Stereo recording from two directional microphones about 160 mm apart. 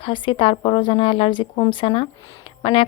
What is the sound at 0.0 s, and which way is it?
Speech, 30° left (ahead or behind).